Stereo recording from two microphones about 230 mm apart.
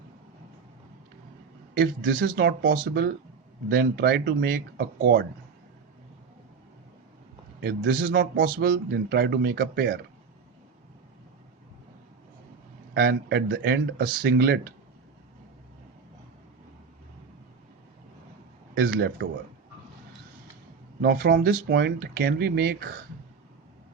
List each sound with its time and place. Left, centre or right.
1.7 s a man's voice: right
7.6 s a man's voice: right
12.9 s a man's voice: right
18.7 s a man's voice: right
21.0 s a man's voice: right